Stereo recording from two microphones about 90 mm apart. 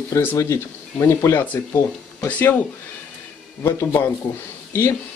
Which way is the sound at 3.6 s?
30° left (ahead or behind).